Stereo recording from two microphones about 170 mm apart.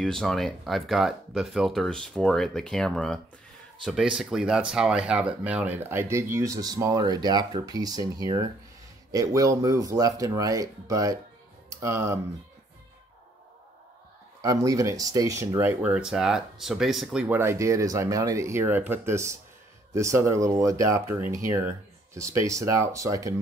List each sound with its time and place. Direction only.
0.0 s speech: centre (ahead or behind); by 12.2 s 15° right (ahead or behind)
14.4 s speech: 20° right (ahead or behind)